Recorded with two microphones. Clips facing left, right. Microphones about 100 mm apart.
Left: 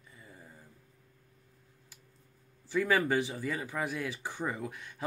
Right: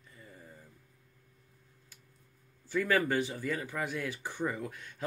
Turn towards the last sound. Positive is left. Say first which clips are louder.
# right 1 dB
turn(degrees=20)  # may be behind; listen again after turning